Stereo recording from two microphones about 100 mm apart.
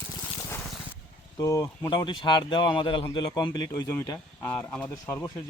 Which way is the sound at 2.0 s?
55° left (ahead or behind).